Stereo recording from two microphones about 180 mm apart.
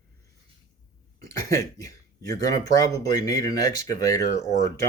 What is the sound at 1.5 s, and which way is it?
Speech, 20° left (ahead or behind).